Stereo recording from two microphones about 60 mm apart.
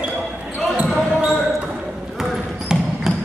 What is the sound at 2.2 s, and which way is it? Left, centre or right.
Basketball bounce, centre.